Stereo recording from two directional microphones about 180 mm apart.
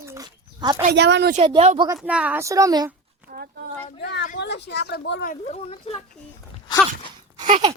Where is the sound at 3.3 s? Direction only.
50° right (ahead or behind).